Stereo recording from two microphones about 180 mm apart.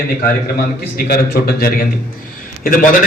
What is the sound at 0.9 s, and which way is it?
A man's voice, 60° left (ahead or behind).